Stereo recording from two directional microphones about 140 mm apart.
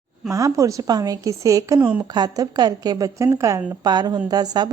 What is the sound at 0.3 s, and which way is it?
A woman's voice, 25° right (ahead or behind).